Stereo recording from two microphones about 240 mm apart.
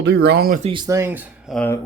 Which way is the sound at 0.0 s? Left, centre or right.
Right.